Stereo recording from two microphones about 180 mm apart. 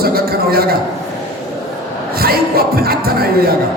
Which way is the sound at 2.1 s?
55° right (ahead or behind).